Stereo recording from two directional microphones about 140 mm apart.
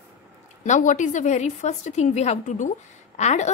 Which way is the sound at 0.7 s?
60° left (ahead or behind).